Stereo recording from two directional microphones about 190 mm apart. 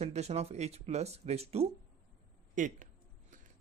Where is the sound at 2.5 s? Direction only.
45° right (ahead or behind).